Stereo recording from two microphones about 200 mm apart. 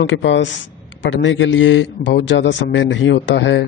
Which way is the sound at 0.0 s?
65° left (ahead or behind).